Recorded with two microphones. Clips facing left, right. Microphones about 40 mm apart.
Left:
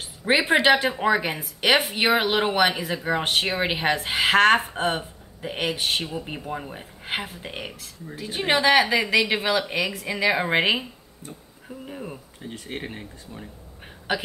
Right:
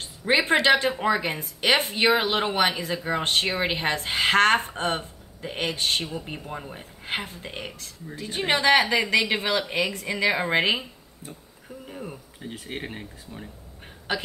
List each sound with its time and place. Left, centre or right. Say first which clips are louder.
0.2 s a woman's voice: left 1 dB; centre
2.0 s speech: even; centre
11.8 s a sound: left 2 dB; centre
12.4 s speech: even; centre